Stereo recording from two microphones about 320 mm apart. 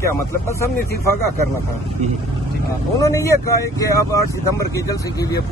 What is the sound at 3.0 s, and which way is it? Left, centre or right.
Speech, centre.